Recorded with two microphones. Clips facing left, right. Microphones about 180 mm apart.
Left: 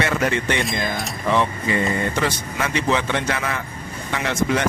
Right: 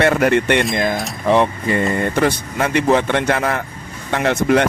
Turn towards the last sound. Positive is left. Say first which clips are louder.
# right 6 dB
turn(degrees=-60)  # may be behind; listen again after turning